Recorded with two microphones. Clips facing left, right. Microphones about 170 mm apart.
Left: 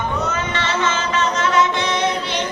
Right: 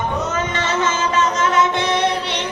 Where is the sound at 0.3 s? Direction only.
45° right (ahead or behind).